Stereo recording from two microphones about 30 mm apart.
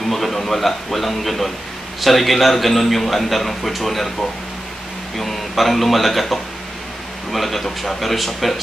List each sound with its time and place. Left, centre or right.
0.1 s a man's voice: centre
5.1 s a man's voice: centre